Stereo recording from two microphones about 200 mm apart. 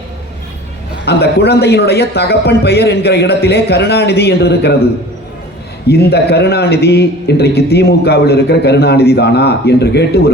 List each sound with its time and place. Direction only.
1.0 s a man's voice: 55° left (ahead or behind)
5.9 s a man's voice: 55° left (ahead or behind)